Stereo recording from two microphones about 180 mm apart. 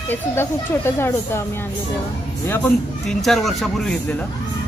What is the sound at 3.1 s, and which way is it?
Speech, centre (ahead or behind).